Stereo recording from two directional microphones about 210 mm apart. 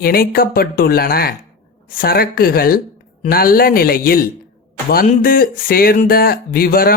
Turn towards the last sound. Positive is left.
turn(degrees=45)  # may be behind; listen again after turning